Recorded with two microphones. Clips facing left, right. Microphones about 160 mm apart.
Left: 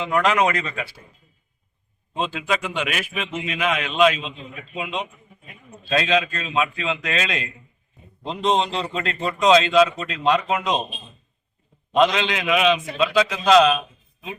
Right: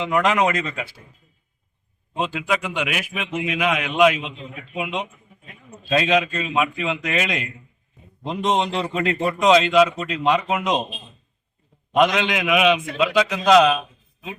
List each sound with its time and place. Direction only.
0.0 s speech: 20° right (ahead or behind)
2.1 s a man's voice: 15° right (ahead or behind)
12.0 s a man's voice: 15° right (ahead or behind)